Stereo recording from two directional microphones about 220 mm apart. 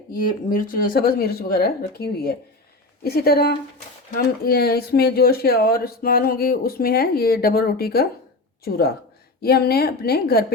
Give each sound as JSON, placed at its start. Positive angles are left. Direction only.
{"t": 0.1, "sound": "speech", "side_deg": 40}
{"t": 9.4, "sound": "speech", "side_deg": 45}